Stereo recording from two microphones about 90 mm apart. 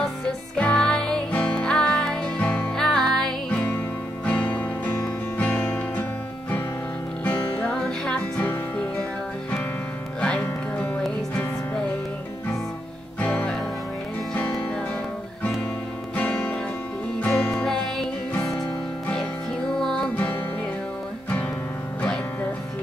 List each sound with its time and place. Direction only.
0.6 s music: 10° left (ahead or behind)
2.7 s music: 5° left (ahead or behind); by 6.0 s 20° left (ahead or behind)
7.2 s music: 10° left (ahead or behind)
10.2 s music: 15° left (ahead or behind)
13.2 s music: 15° left (ahead or behind)
16.2 s music: 20° left (ahead or behind)
19.8 s music: 5° left (ahead or behind)